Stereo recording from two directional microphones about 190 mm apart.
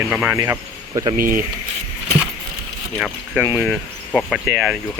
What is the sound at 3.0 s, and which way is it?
Speech, 5° right (ahead or behind).